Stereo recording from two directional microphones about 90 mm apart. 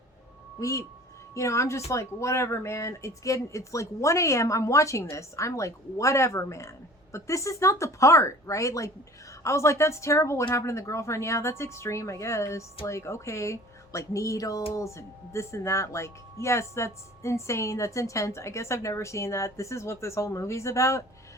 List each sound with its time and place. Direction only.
0.6 s speech: 35° left (ahead or behind)